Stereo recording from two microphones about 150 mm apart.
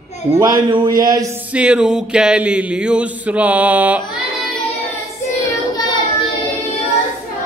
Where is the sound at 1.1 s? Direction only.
25° right (ahead or behind).